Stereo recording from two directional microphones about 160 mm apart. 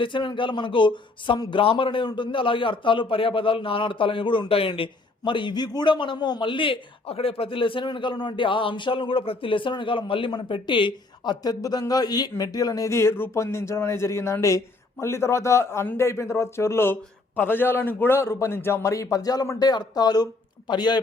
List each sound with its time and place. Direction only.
0.0 s speech: 30° left (ahead or behind)